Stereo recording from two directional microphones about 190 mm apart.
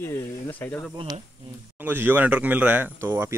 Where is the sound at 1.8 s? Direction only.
10° right (ahead or behind).